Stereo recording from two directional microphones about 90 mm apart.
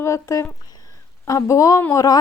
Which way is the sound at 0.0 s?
30° left (ahead or behind).